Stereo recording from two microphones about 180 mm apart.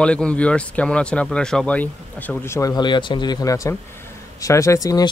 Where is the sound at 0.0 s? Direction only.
5° left (ahead or behind).